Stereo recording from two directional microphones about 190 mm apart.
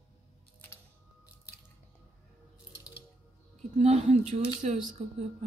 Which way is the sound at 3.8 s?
35° right (ahead or behind).